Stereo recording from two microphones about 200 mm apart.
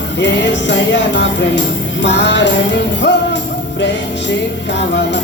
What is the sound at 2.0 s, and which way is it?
Music, 60° left (ahead or behind).